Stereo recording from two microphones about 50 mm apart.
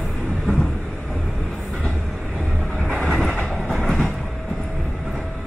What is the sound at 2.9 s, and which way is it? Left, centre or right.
Train, centre.